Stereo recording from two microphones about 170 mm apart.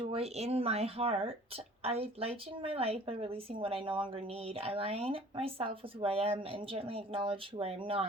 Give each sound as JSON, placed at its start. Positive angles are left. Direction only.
{"t": 0.1, "sound": "a woman's voice", "side_deg": -40}